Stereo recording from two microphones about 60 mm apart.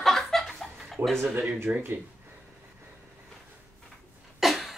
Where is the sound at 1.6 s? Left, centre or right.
Right.